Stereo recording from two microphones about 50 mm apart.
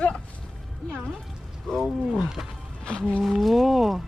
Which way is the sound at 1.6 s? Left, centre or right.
Centre.